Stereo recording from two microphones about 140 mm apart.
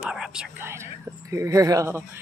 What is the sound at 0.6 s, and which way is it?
Speech, 20° right (ahead or behind).